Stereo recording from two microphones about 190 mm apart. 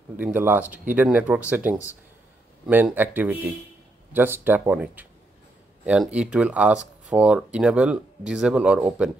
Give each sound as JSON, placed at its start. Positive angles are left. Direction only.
{"t": 0.2, "sound": "speech", "side_deg": -10}